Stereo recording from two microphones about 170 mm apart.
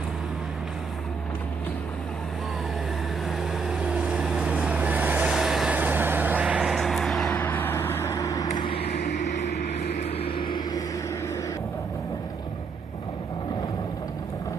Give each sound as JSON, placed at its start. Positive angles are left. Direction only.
{"t": 3.3, "sound": "vehicle", "side_deg": 0}
{"t": 7.3, "sound": "vehicle", "side_deg": 10}